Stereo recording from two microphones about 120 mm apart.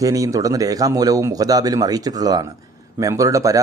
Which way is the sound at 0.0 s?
30° right (ahead or behind).